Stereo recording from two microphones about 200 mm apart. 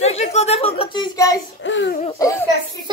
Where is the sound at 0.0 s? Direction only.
35° left (ahead or behind); by 1.4 s 15° left (ahead or behind).